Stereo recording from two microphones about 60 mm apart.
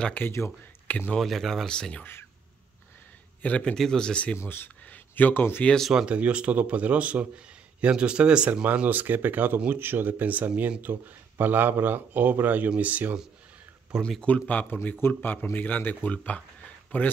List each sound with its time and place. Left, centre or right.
0.2 s speech: left
1.1 s speech: centre
1.7 s speech: centre
3.4 s speech: centre
3.7 s speech: centre
4.4 s speech: left
4.8 s a sound: left
5.9 s speech: centre
8.7 s speech: right
13.9 s speech: centre
14.7 s speech: left